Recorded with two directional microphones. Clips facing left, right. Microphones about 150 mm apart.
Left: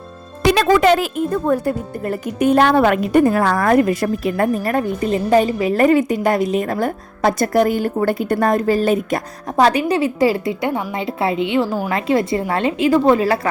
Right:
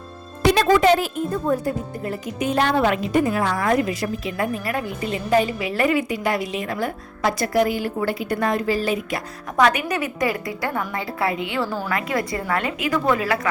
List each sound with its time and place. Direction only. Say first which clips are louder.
0.4 s speech: left 3 dB; 90° left
1.5 s a woman's voice: left 4 dB; 60° left (ahead or behind)
9.6 s a woman's voice: left 5 dB; 35° left (ahead or behind)